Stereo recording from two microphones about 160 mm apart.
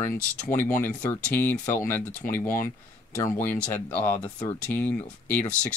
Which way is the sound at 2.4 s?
60° left (ahead or behind).